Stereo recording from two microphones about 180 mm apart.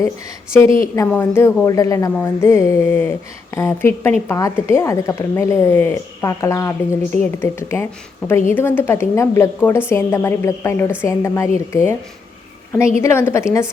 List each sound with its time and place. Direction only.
0.8 s a woman's voice: 15° left (ahead or behind)
13.0 s a woman's voice: 15° left (ahead or behind)